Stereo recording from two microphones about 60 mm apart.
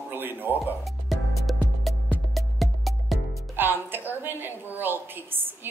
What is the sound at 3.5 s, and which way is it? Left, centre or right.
A woman's voice, right.